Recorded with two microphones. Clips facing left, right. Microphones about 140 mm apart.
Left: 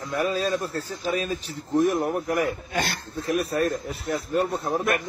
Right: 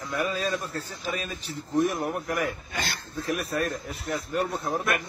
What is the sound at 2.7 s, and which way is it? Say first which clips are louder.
Speech: left 5 dB; 65° left (ahead or behind).